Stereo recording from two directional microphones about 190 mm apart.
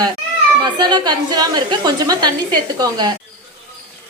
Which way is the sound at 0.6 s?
25° right (ahead or behind).